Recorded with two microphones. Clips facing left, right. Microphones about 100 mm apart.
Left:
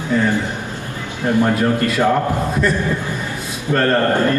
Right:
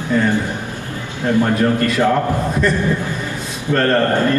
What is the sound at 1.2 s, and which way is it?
Speech, 15° left (ahead or behind).